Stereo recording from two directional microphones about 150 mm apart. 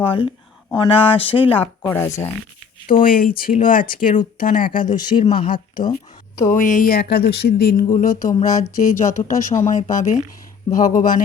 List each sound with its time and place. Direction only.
0.1 s speech: 35° left (ahead or behind)
1.9 s speech: 15° left (ahead or behind)
3.0 s speech: 75° left (ahead or behind)
4.8 s speech: 30° left (ahead or behind)
6.5 s speech: 60° left (ahead or behind); by 7.9 s 90° left
7.9 s speech: 60° left (ahead or behind)